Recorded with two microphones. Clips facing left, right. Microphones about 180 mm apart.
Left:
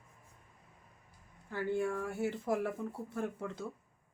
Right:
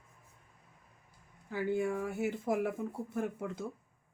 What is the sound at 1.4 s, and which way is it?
Speech, 10° right (ahead or behind).